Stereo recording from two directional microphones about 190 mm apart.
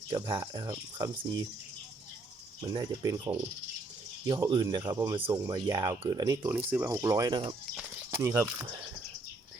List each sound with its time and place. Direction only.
0.1 s speech: 20° right (ahead or behind)
2.6 s speech: 25° right (ahead or behind)
7.8 s speech: 10° right (ahead or behind)